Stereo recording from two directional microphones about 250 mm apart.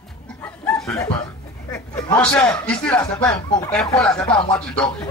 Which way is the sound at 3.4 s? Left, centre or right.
Centre.